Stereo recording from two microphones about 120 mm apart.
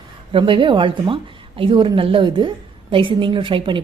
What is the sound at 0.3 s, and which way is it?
A woman's voice, 45° right (ahead or behind).